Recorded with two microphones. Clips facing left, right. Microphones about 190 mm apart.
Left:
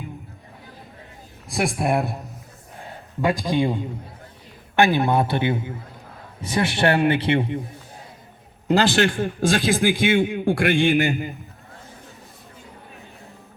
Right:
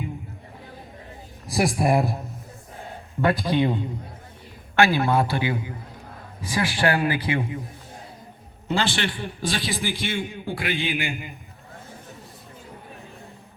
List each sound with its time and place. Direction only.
1.5 s speech: centre (ahead or behind)
3.4 s a man's voice: 10° left (ahead or behind)
4.8 s speech: 20° left (ahead or behind)
8.7 s a man's voice: 45° left (ahead or behind)